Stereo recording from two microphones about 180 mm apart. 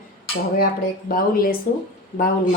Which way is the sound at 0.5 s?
55° left (ahead or behind).